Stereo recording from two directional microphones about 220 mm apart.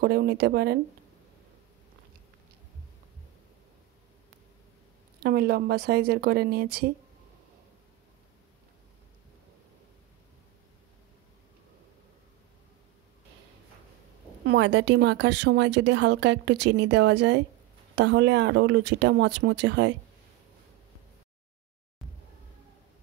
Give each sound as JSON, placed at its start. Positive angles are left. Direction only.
{"t": 0.0, "sound": "speech", "side_deg": -45}
{"t": 5.2, "sound": "speech", "side_deg": -45}
{"t": 14.4, "sound": "speech", "side_deg": -50}